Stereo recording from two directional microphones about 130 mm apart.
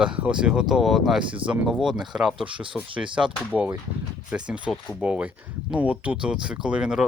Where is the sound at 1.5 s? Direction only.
5° right (ahead or behind).